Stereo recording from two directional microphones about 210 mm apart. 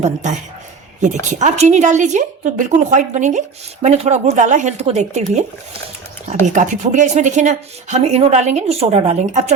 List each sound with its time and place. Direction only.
0.0 s a woman's voice: 35° right (ahead or behind)